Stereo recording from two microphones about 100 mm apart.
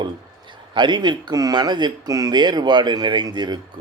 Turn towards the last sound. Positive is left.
turn(degrees=-45)  # may be behind; listen again after turning